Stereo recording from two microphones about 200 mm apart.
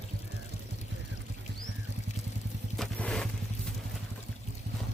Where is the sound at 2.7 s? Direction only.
5° left (ahead or behind).